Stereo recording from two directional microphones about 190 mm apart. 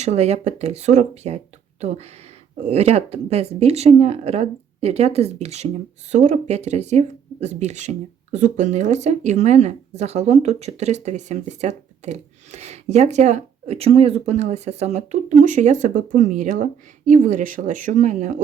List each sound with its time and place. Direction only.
0.0 s speech: 35° right (ahead or behind)
2.6 s speech: 35° right (ahead or behind)